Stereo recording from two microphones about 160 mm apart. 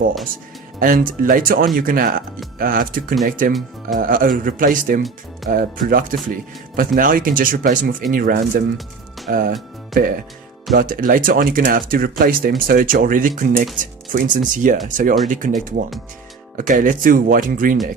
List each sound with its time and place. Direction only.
0.8 s speech: 60° right (ahead or behind)